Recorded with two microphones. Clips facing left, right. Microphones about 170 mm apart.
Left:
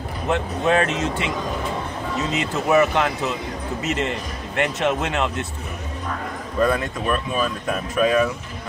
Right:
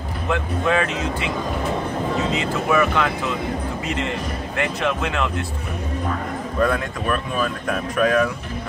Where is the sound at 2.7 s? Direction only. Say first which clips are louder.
Left 2 dB; 20° left (ahead or behind).